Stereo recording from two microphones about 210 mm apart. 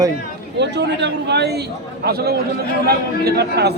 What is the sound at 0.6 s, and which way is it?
A man's voice, 55° right (ahead or behind).